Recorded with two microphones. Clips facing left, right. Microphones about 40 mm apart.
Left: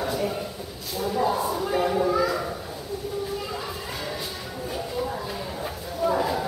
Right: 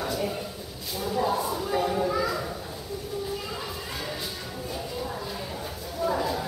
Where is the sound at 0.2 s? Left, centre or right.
Centre.